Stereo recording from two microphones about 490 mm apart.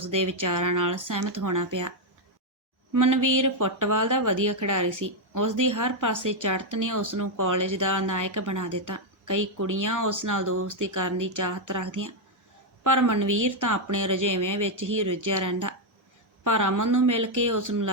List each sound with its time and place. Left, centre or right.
0.0 s speech: right
2.9 s speech: right